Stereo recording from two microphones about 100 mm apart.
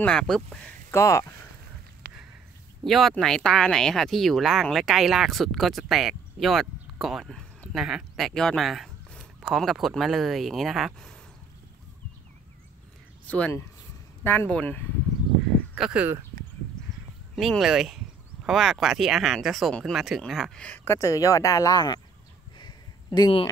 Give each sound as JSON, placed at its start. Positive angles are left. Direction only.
{"t": 0.0, "sound": "speech", "side_deg": 10}
{"t": 0.9, "sound": "speech", "side_deg": 30}
{"t": 2.8, "sound": "speech", "side_deg": 0}
{"t": 14.2, "sound": "speech", "side_deg": 25}
{"t": 15.7, "sound": "speech", "side_deg": -10}
{"t": 17.4, "sound": "speech", "side_deg": 0}
{"t": 20.5, "sound": "speech", "side_deg": 10}
{"t": 20.8, "sound": "speech", "side_deg": 30}
{"t": 22.6, "sound": "a sound", "side_deg": 45}